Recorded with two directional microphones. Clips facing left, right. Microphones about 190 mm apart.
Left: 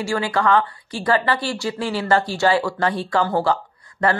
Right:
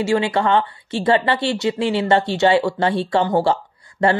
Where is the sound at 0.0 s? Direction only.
25° right (ahead or behind).